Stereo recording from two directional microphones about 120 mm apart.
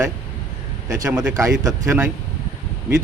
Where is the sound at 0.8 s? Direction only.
25° right (ahead or behind).